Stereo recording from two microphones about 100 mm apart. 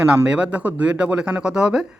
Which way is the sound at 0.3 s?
10° right (ahead or behind).